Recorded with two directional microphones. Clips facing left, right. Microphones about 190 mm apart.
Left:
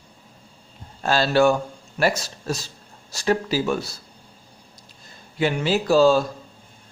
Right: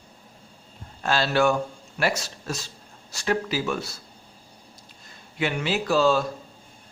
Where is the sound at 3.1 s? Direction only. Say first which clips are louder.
Left 4 dB; 35° left (ahead or behind).